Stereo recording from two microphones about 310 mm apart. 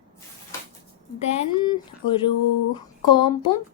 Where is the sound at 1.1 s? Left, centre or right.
Centre.